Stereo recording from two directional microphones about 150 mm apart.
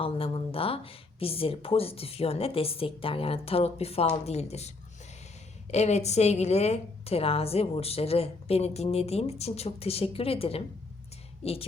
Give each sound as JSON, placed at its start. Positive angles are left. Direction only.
{"t": 0.0, "sound": "speech", "side_deg": 40}
{"t": 5.7, "sound": "a woman's voice", "side_deg": 45}